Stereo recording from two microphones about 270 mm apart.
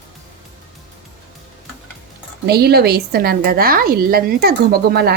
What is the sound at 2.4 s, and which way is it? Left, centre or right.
Speech, right.